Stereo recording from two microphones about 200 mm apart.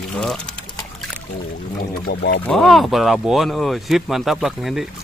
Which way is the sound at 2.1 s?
55° left (ahead or behind).